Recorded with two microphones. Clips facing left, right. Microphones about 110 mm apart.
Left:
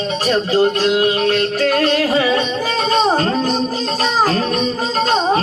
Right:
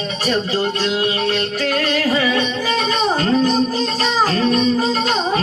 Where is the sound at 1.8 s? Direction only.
30° left (ahead or behind).